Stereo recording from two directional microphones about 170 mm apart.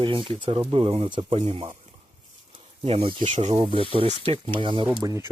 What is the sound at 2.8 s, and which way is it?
Speech, 35° right (ahead or behind).